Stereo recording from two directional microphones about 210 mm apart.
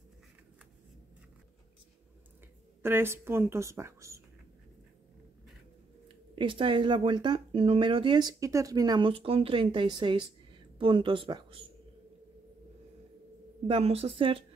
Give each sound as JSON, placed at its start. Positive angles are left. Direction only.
{"t": 2.8, "sound": "a woman's voice", "side_deg": -10}
{"t": 6.3, "sound": "speech", "side_deg": -25}
{"t": 13.7, "sound": "speech", "side_deg": -25}